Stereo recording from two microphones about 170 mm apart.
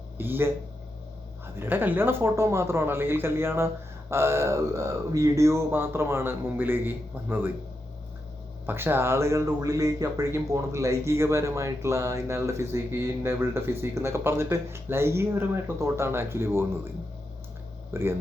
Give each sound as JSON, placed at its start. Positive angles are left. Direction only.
{"t": 0.2, "sound": "speech", "side_deg": -10}
{"t": 1.5, "sound": "speech", "side_deg": -10}
{"t": 8.6, "sound": "speech", "side_deg": -10}
{"t": 17.9, "sound": "speech", "side_deg": -15}